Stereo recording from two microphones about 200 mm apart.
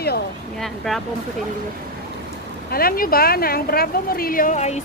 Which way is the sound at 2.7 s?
45° left (ahead or behind).